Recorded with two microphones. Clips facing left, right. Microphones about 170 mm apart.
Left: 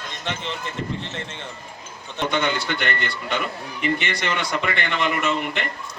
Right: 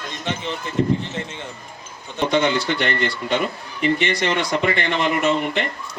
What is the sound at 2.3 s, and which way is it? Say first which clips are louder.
A man's voice: right 5 dB; 35° right (ahead or behind).